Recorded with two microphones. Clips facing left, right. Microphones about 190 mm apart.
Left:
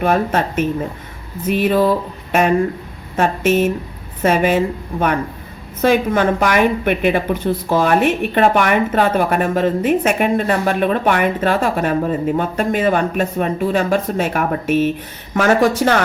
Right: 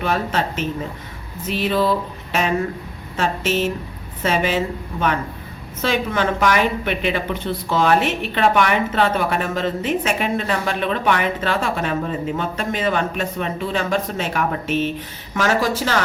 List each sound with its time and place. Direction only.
0.0 s a woman's voice: 50° left (ahead or behind)